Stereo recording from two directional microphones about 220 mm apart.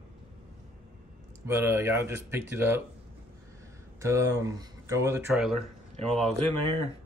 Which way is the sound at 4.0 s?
15° right (ahead or behind).